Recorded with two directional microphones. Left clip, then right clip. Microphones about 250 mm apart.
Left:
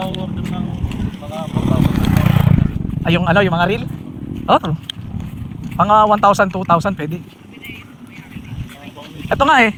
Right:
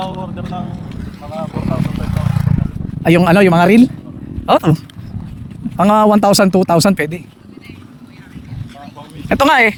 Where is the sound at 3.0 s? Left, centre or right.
Right.